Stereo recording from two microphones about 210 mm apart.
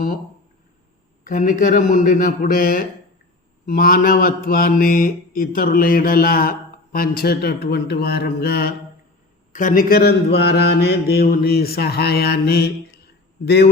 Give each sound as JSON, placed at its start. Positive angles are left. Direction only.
{"t": 1.2, "sound": "a man's voice", "side_deg": 40}
{"t": 3.7, "sound": "mantra", "side_deg": 45}
{"t": 9.5, "sound": "mantra", "side_deg": 40}